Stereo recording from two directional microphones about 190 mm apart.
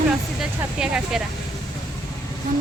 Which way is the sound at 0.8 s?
5° right (ahead or behind).